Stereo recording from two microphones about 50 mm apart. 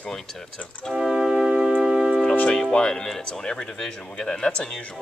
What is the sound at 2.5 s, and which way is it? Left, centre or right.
Speech, centre.